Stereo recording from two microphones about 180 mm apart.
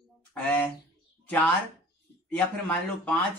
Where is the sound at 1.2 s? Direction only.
10° left (ahead or behind).